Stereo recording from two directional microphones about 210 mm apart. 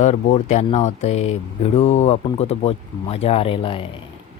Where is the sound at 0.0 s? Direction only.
35° left (ahead or behind).